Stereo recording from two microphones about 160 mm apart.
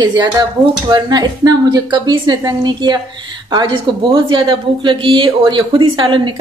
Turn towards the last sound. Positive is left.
turn(degrees=-30)  # may be behind; listen again after turning